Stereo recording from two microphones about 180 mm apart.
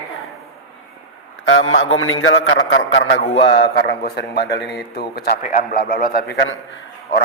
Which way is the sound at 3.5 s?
65° left (ahead or behind).